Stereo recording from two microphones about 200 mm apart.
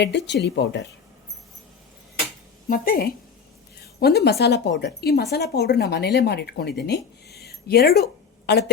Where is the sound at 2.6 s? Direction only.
45° left (ahead or behind).